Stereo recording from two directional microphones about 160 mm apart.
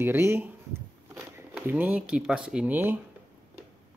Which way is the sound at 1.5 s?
10° right (ahead or behind).